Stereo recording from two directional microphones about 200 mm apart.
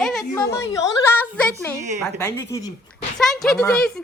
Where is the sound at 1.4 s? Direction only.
10° left (ahead or behind).